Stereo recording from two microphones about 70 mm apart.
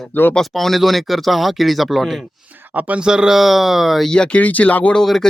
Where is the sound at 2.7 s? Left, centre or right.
Right.